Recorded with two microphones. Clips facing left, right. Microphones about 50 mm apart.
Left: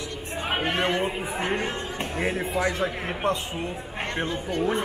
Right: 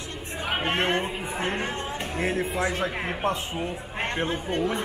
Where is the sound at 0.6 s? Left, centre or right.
Right.